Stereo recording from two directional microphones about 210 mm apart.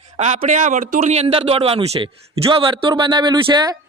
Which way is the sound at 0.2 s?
35° right (ahead or behind).